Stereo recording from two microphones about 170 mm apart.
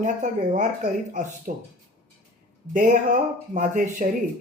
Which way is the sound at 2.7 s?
50° right (ahead or behind).